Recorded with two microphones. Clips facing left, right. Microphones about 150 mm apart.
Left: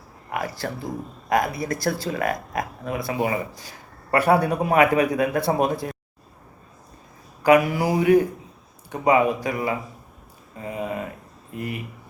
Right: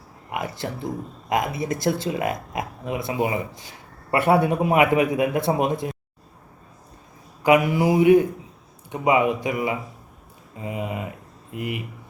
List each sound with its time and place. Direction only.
0.3 s speech: 20° right (ahead or behind)
7.4 s speech: 20° right (ahead or behind)